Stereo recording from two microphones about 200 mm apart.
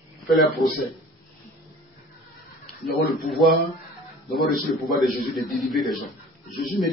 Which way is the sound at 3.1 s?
Centre (ahead or behind).